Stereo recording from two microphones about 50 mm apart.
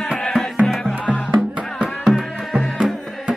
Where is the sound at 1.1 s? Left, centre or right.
Right.